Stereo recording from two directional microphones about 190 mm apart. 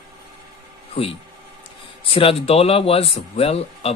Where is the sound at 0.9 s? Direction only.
30° left (ahead or behind).